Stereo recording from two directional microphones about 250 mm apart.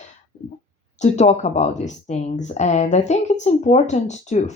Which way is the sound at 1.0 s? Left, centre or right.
Left.